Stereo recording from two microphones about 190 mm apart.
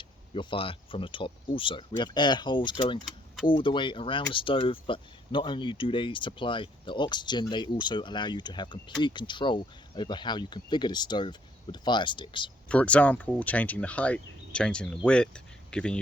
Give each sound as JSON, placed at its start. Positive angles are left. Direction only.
{"t": 0.0, "sound": "speech", "side_deg": 25}
{"t": 12.6, "sound": "speech", "side_deg": 5}